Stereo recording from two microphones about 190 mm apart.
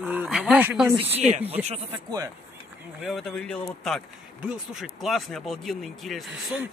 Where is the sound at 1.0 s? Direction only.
35° right (ahead or behind).